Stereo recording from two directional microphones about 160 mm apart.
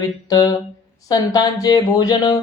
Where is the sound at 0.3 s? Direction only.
25° left (ahead or behind).